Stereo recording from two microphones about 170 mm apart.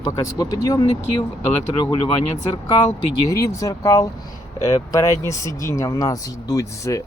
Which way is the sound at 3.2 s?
20° left (ahead or behind).